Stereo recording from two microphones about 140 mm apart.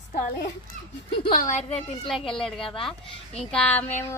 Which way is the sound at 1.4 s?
60° left (ahead or behind).